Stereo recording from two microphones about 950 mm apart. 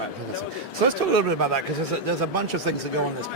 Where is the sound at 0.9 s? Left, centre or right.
Right.